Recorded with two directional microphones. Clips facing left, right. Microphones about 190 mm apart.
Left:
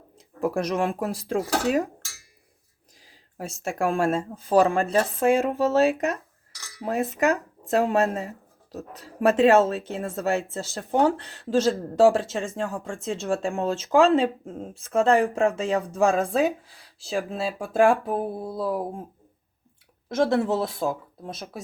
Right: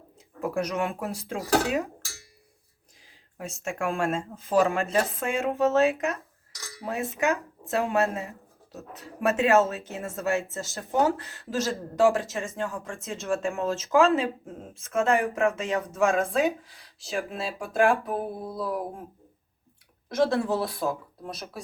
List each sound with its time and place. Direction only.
0.4 s speech: 35° left (ahead or behind)
3.3 s speech: 35° left (ahead or behind)
20.1 s speech: 25° left (ahead or behind)